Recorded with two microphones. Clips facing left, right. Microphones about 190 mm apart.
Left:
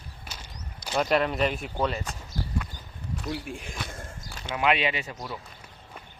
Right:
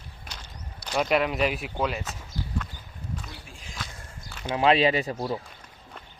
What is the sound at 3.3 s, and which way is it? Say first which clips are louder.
Speech: left 11 dB; 60° left (ahead or behind).